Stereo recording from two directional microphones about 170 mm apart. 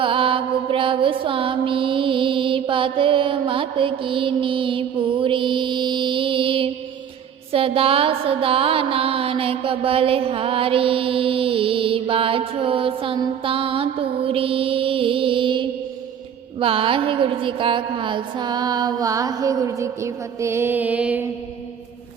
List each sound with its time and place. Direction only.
0.0 s mantra: 30° right (ahead or behind)
16.6 s a woman's voice: 35° right (ahead or behind); by 21.2 s 10° right (ahead or behind)